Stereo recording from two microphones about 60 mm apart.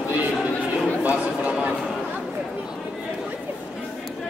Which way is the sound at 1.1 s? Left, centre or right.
Right.